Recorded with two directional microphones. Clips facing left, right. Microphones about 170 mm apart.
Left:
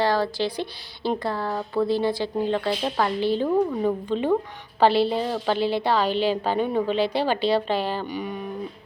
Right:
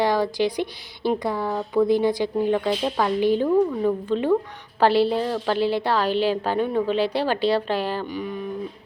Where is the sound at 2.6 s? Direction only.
5° left (ahead or behind).